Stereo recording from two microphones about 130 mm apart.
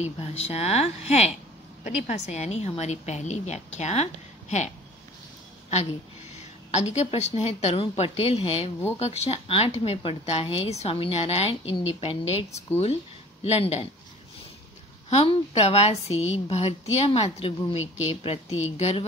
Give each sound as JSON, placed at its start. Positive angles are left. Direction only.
{"t": 0.0, "sound": "a woman's voice", "side_deg": 55}
{"t": 6.7, "sound": "speech", "side_deg": 60}
{"t": 15.0, "sound": "speech", "side_deg": 55}